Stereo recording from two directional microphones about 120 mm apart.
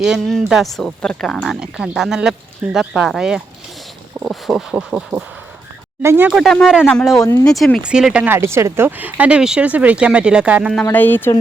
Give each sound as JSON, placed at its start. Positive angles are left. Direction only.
{"t": 0.0, "sound": "speech", "side_deg": 0}
{"t": 6.0, "sound": "speech", "side_deg": -20}
{"t": 6.2, "sound": "speech", "side_deg": 0}
{"t": 7.9, "sound": "speech", "side_deg": -5}
{"t": 8.3, "sound": "speech", "side_deg": -20}
{"t": 10.8, "sound": "speech", "side_deg": 15}